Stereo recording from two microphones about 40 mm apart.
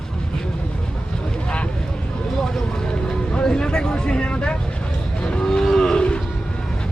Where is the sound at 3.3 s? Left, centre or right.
Centre.